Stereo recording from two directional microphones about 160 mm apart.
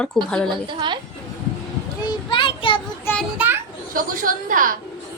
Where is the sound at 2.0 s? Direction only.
30° left (ahead or behind).